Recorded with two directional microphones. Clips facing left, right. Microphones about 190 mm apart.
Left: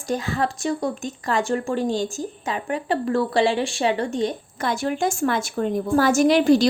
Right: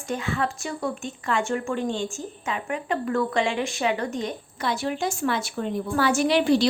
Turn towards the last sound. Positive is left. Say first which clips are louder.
# left 4 dB
turn(degrees=45)  # may be behind; listen again after turning